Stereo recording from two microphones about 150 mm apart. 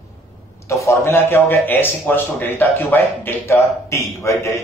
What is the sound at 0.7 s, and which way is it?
A man's voice, 20° left (ahead or behind).